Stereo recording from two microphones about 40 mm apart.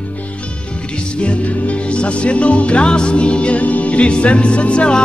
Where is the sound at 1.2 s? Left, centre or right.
Left.